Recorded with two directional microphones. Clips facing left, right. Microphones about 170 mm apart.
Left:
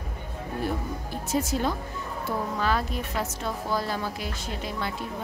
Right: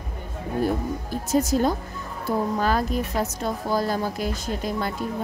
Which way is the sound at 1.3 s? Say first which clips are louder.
Right 6 dB; 40° right (ahead or behind).